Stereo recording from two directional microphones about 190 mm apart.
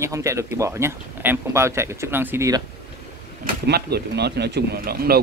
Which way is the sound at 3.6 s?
60° right (ahead or behind).